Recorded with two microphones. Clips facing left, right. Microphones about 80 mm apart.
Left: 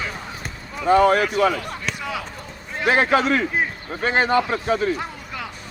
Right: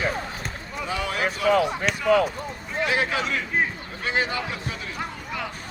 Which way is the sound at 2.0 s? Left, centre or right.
Right.